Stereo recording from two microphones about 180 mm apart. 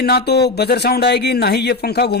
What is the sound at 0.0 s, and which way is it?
Speech, 65° left (ahead or behind).